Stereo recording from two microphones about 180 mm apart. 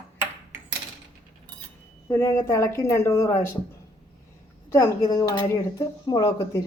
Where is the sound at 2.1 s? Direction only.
15° left (ahead or behind).